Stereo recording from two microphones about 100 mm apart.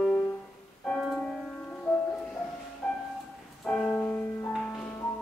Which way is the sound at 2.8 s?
10° left (ahead or behind).